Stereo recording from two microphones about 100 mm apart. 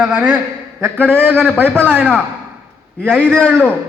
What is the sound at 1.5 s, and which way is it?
Speech, 15° left (ahead or behind).